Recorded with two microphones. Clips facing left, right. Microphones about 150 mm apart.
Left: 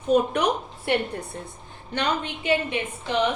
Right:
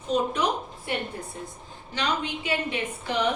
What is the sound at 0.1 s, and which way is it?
Speech, 55° left (ahead or behind).